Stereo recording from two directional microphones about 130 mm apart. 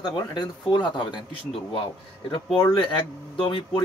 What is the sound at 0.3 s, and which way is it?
Speech, 35° left (ahead or behind).